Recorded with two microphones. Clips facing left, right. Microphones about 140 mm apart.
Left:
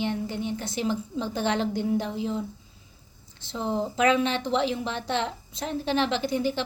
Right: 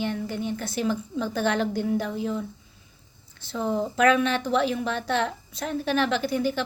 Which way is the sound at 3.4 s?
20° left (ahead or behind).